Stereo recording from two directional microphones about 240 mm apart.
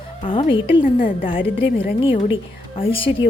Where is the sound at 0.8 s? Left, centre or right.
Left.